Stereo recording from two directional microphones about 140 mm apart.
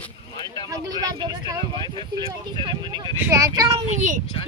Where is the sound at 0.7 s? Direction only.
25° right (ahead or behind).